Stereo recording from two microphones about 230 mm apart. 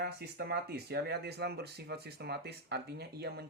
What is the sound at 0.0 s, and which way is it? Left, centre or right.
Speech, right.